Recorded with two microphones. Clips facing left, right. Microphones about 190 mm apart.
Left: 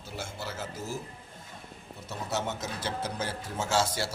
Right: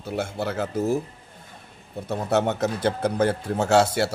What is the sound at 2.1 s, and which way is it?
Speech, 60° right (ahead or behind).